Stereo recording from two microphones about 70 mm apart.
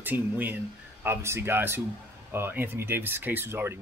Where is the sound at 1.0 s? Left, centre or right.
Right.